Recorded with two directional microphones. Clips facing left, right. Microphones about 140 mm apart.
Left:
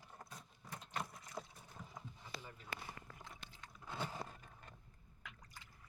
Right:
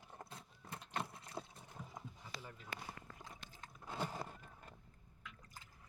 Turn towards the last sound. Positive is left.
turn(degrees=-10)  # may be behind; listen again after turning